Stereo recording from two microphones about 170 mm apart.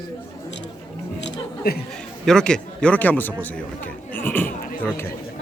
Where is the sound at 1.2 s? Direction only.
75° left (ahead or behind).